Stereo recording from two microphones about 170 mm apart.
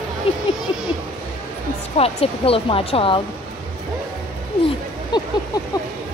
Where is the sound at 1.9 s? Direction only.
35° left (ahead or behind).